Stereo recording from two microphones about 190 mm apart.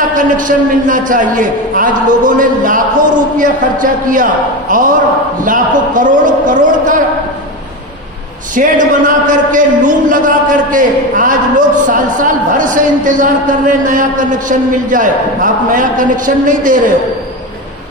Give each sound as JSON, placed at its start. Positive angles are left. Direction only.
{"t": 0.1, "sound": "a man's voice", "side_deg": -45}
{"t": 8.5, "sound": "a man's voice", "side_deg": -45}